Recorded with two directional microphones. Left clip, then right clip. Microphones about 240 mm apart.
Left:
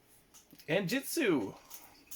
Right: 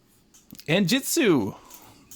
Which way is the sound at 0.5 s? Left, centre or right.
Right.